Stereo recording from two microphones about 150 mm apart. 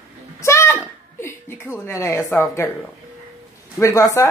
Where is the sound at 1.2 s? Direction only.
15° left (ahead or behind).